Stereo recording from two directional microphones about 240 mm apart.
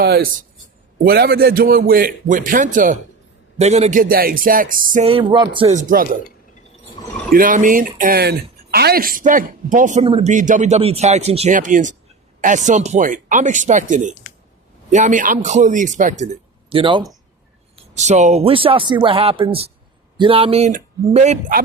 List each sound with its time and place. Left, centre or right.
0.0 s speech: right
5.0 s speech: right
7.3 s a man's voice: right